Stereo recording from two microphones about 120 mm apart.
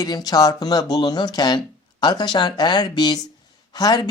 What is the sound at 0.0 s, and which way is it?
Speech, 30° left (ahead or behind).